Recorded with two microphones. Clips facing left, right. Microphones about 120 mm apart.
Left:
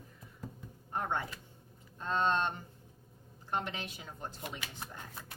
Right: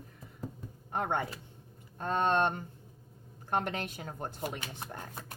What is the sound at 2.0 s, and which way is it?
Speech, 55° right (ahead or behind).